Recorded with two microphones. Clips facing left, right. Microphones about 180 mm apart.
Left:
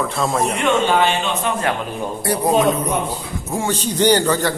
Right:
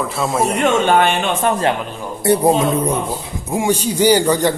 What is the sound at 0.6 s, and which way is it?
Speech, 55° right (ahead or behind).